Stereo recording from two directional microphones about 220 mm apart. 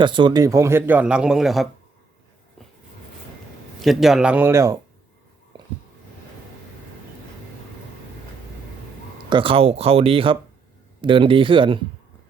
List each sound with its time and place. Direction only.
0.0 s a man's voice: 20° right (ahead or behind); by 1.6 s centre (ahead or behind)
3.8 s speech: centre (ahead or behind)
9.3 s speech: 25° right (ahead or behind)